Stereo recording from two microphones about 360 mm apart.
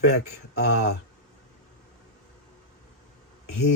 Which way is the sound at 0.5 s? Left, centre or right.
Left.